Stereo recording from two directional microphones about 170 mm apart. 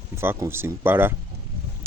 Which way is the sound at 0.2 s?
15° right (ahead or behind).